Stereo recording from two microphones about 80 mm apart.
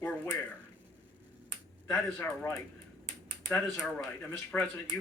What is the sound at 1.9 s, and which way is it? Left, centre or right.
Speech, left.